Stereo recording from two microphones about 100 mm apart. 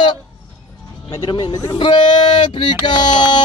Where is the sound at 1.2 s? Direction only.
50° left (ahead or behind).